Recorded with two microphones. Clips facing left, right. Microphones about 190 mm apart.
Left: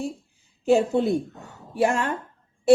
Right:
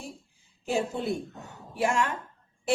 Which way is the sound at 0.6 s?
40° left (ahead or behind).